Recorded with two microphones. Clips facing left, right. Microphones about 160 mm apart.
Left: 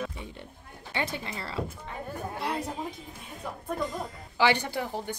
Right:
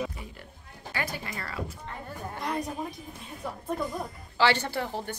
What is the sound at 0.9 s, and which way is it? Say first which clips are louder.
Speech: left 2 dB; 25° left (ahead or behind).